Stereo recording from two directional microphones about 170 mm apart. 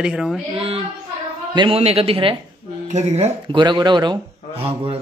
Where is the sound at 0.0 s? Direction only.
5° right (ahead or behind).